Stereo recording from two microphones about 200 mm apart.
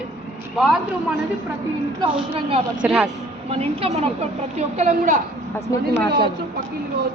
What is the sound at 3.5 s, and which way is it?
A woman's voice, 30° right (ahead or behind).